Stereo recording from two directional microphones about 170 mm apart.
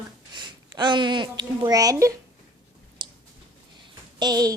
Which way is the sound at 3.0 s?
30° right (ahead or behind).